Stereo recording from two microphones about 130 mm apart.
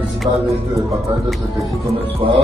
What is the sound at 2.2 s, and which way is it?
Music, 45° right (ahead or behind).